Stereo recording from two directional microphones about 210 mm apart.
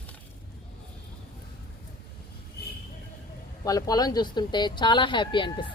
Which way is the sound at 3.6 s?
15° left (ahead or behind).